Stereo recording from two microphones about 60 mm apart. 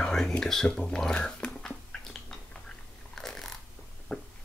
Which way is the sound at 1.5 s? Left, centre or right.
Centre.